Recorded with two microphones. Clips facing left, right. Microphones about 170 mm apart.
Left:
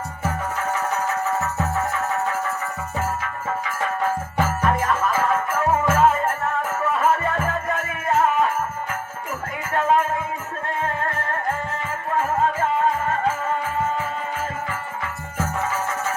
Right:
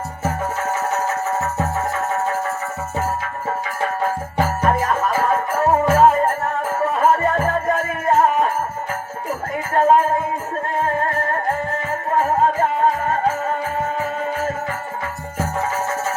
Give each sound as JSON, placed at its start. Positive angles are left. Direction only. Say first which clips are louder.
{"t": 4.0, "sound": "music", "louder": "right 1 dB", "side_deg": -40}
{"t": 9.7, "sound": "music", "louder": "right 5 dB", "side_deg": -40}
{"t": 12.1, "sound": "music", "louder": "right 4 dB", "side_deg": -40}